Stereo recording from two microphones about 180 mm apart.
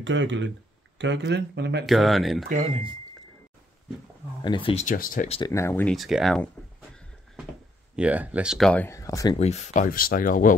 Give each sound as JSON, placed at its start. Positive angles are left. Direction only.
{"t": 0.0, "sound": "speech", "side_deg": -90}
{"t": 0.9, "sound": "speech", "side_deg": -75}
{"t": 1.9, "sound": "speech", "side_deg": 0}
{"t": 2.5, "sound": "speech", "side_deg": -40}
{"t": 4.4, "sound": "speech", "side_deg": 25}
{"t": 4.8, "sound": "speech", "side_deg": 50}
{"t": 5.5, "sound": "speech", "side_deg": 15}
{"t": 5.9, "sound": "speech", "side_deg": 0}
{"t": 7.9, "sound": "speech", "side_deg": -10}
{"t": 9.4, "sound": "speech", "side_deg": 40}